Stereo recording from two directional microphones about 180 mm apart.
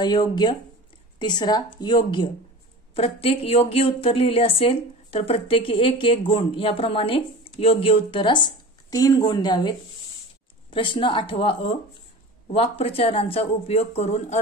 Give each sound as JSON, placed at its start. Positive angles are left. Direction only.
{"t": 0.0, "sound": "speech", "side_deg": 25}